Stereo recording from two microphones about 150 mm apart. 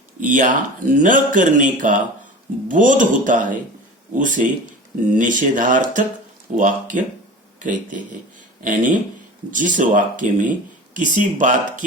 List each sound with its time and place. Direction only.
0.2 s speech: 60° right (ahead or behind)